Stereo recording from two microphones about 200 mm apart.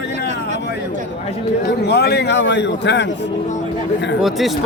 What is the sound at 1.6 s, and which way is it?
A man's voice, 55° left (ahead or behind).